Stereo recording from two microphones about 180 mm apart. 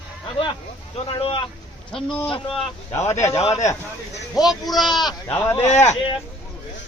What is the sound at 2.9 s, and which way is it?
Speech, 15° left (ahead or behind).